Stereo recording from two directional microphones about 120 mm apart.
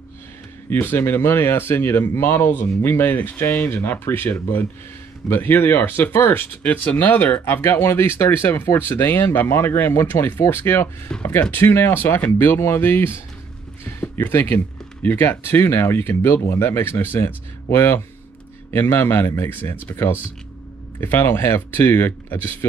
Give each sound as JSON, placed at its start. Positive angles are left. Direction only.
{"t": 0.7, "sound": "speech", "side_deg": 20}
{"t": 11.1, "sound": "speech", "side_deg": 10}
{"t": 11.5, "sound": "speech", "side_deg": 20}